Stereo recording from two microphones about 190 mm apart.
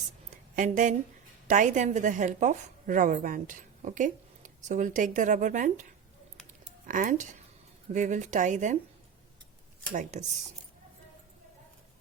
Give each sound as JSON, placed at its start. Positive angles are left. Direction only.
{"t": 0.5, "sound": "a woman's voice", "side_deg": -40}
{"t": 6.8, "sound": "a woman's voice", "side_deg": -45}
{"t": 9.9, "sound": "a woman's voice", "side_deg": -40}